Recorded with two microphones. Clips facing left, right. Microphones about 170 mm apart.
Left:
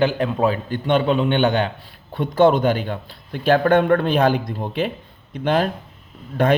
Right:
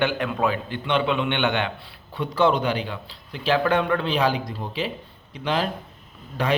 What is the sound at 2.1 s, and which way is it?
A man's voice, 50° left (ahead or behind).